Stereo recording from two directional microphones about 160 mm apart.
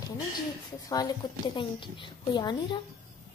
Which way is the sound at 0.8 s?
25° left (ahead or behind).